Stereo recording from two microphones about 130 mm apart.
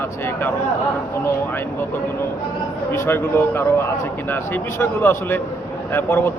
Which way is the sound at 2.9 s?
20° left (ahead or behind).